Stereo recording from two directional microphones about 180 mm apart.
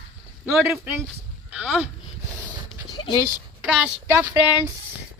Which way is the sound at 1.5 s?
5° right (ahead or behind).